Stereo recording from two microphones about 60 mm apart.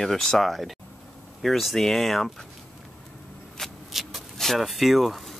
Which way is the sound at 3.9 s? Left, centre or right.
Centre.